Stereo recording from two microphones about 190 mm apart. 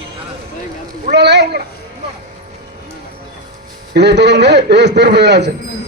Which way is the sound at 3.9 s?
60° right (ahead or behind).